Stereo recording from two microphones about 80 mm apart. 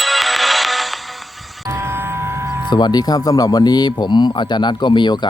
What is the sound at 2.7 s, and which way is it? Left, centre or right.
Speech, left.